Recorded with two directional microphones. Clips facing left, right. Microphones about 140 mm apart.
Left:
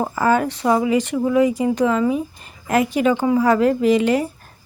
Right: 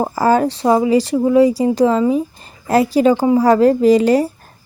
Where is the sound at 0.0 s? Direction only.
35° right (ahead or behind).